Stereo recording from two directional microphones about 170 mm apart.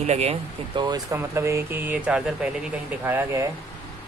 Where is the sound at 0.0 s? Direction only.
40° right (ahead or behind).